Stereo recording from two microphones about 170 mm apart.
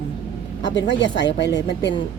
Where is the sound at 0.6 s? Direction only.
25° left (ahead or behind).